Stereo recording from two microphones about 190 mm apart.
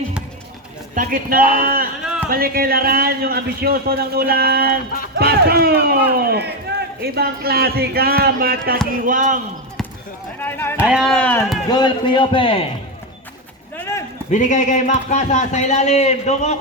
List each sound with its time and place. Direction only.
0.9 s a man's voice: 50° right (ahead or behind)
10.4 s speech: 10° left (ahead or behind)
10.8 s speech: 5° right (ahead or behind)
11.7 s a man's voice: 25° left (ahead or behind)
13.7 s run: 15° left (ahead or behind)
14.3 s a man's voice: 40° left (ahead or behind)